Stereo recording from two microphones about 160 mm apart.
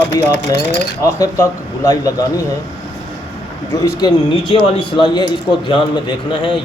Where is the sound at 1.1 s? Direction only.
20° left (ahead or behind).